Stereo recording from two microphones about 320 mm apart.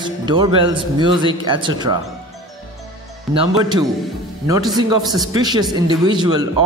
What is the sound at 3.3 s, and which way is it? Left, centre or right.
A man's voice, centre.